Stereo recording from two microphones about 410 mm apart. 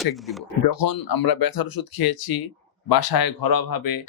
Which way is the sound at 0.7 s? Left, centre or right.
Left.